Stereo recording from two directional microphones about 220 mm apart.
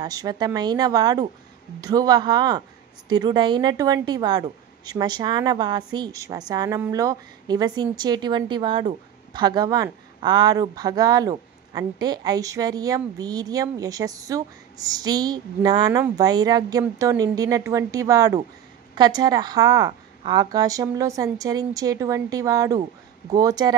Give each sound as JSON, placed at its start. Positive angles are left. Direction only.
{"t": 0.0, "sound": "a woman's voice", "side_deg": -15}